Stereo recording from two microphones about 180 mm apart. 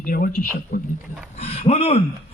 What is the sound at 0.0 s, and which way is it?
Speech, 55° left (ahead or behind).